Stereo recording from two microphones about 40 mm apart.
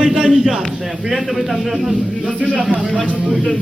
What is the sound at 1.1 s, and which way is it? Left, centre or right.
Speech, centre.